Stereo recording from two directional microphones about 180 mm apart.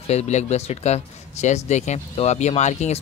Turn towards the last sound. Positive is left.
turn(degrees=40)  # may be behind; listen again after turning